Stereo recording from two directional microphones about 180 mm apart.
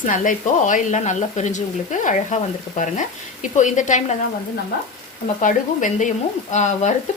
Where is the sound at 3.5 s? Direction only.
45° left (ahead or behind).